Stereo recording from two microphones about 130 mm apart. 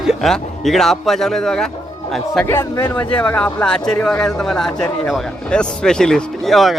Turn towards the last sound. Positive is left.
turn(degrees=0)  # may be behind; listen again after turning